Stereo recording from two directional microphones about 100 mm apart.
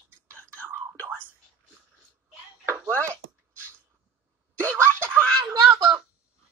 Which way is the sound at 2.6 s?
25° right (ahead or behind).